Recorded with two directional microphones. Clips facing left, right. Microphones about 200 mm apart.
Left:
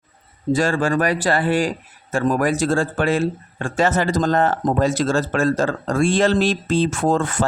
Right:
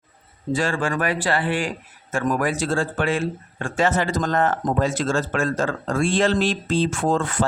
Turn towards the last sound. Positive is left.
turn(degrees=45)  # may be behind; listen again after turning